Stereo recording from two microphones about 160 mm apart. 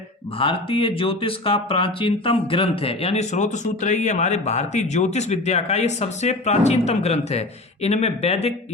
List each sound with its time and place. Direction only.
0.3 s speech: 35° left (ahead or behind)